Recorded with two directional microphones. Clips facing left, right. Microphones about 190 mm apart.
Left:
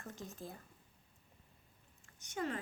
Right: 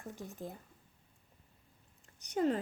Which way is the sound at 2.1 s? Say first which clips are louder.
Right 8 dB; 35° right (ahead or behind).